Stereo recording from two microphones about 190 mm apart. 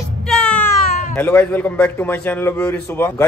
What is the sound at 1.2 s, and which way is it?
A man's voice, 10° left (ahead or behind).